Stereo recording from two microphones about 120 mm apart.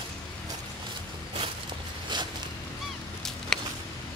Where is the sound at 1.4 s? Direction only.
40° right (ahead or behind).